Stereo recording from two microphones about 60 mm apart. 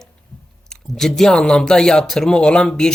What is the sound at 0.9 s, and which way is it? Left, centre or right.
Speech, centre.